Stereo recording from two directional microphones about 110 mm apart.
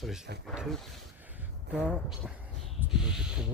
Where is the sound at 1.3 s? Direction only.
15° right (ahead or behind).